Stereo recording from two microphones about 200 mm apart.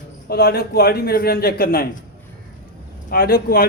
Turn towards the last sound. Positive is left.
turn(degrees=50)  # may be behind; listen again after turning